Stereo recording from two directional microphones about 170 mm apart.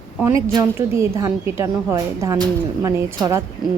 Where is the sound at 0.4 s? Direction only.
15° right (ahead or behind).